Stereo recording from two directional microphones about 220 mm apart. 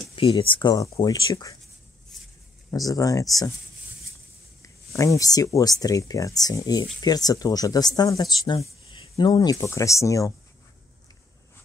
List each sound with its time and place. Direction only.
0.1 s speech: 25° left (ahead or behind)
2.7 s speech: 15° left (ahead or behind)
4.6 s speech: 15° left (ahead or behind)